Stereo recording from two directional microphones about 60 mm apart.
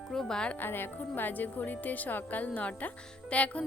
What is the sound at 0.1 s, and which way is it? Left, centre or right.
Speech, centre.